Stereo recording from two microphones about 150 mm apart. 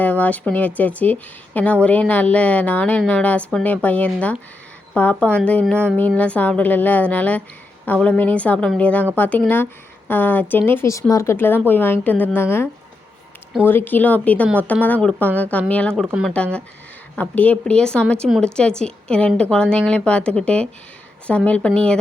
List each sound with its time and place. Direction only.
0.0 s a woman's voice: 10° left (ahead or behind)
13.7 s a woman's voice: 15° left (ahead or behind)